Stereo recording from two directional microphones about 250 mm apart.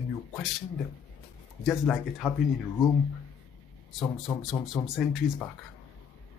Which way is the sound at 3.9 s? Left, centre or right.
Centre.